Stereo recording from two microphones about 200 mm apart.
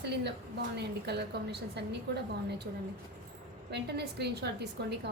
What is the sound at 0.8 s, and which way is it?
A woman's voice, 55° right (ahead or behind).